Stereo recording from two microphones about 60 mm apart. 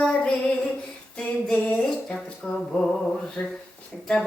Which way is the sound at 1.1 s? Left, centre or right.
Left.